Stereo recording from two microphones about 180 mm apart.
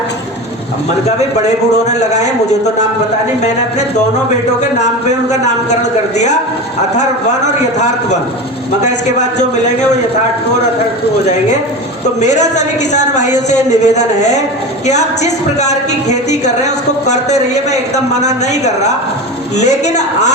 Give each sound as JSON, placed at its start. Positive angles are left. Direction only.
{"t": 1.0, "sound": "a woman's voice", "side_deg": 40}
{"t": 5.8, "sound": "a woman's voice", "side_deg": 40}
{"t": 12.2, "sound": "a woman's voice", "side_deg": 40}